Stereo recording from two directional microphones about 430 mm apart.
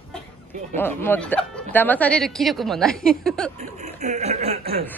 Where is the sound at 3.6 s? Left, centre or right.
Centre.